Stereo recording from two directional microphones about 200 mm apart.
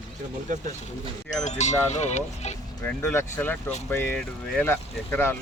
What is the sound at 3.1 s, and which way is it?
Speech, 10° left (ahead or behind).